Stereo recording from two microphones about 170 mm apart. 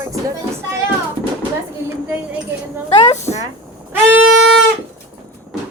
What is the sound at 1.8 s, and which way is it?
Speech, 10° right (ahead or behind).